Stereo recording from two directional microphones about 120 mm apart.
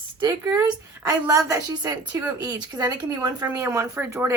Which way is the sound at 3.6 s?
20° right (ahead or behind).